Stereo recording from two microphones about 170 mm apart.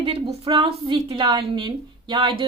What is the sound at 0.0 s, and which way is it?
Speech, 35° right (ahead or behind).